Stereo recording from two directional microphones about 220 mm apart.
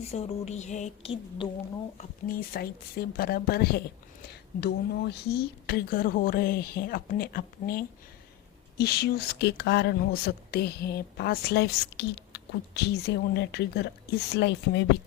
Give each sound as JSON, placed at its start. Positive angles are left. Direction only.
{"t": 0.0, "sound": "a woman's voice", "side_deg": 30}
{"t": 2.0, "sound": "speech", "side_deg": 40}